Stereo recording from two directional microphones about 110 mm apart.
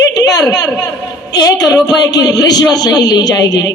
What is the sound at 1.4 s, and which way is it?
Speech, 35° left (ahead or behind).